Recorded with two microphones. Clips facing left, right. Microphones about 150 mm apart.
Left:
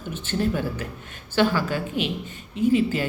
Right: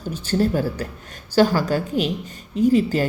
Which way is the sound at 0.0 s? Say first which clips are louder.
Right 4 dB; 40° right (ahead or behind).